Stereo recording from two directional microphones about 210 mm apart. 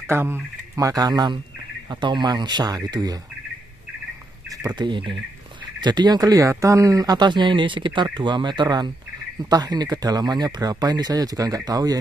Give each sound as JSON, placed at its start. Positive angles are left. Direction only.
{"t": 0.0, "sound": "speech", "side_deg": -10}
{"t": 4.5, "sound": "speech", "side_deg": -20}